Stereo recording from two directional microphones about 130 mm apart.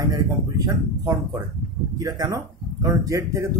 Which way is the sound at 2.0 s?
30° right (ahead or behind).